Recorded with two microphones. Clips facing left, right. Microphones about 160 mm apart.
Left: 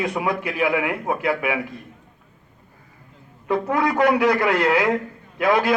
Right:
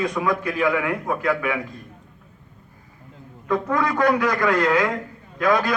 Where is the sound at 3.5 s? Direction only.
25° left (ahead or behind).